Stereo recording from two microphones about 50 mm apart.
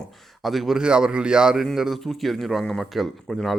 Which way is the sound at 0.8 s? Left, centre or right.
Centre.